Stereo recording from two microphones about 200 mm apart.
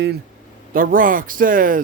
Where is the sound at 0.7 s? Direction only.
45° right (ahead or behind).